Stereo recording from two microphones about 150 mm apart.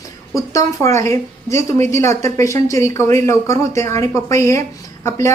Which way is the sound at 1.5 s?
50° right (ahead or behind).